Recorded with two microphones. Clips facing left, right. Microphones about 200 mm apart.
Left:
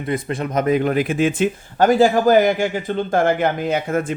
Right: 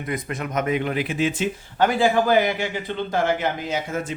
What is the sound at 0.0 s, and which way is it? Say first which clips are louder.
Speech: left 5 dB; 30° left (ahead or behind).